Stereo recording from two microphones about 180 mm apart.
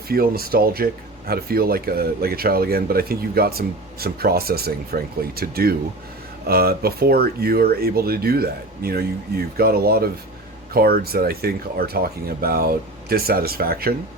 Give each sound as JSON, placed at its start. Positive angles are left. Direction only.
{"t": 0.1, "sound": "speech", "side_deg": -55}